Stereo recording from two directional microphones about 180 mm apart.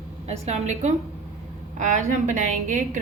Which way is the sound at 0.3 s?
35° right (ahead or behind).